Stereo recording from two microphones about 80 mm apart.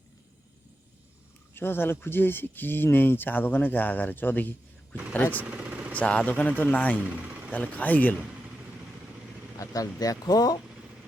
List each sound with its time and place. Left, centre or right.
1.5 s speech: left
5.5 s vehicle: centre
5.9 s speech: centre
7.0 s vehicle: centre
7.5 s speech: centre
9.6 s speech: left